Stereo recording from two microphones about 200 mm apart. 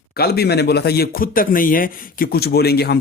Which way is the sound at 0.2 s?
50° left (ahead or behind).